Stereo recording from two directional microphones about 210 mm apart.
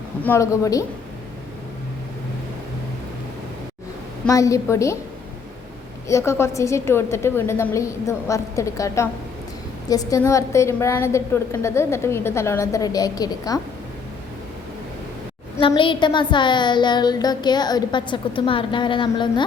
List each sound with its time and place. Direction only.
0.3 s a woman's voice: 15° left (ahead or behind)
4.3 s a woman's voice: 15° left (ahead or behind)
6.1 s a woman's voice: 15° left (ahead or behind)
15.6 s a woman's voice: 25° left (ahead or behind)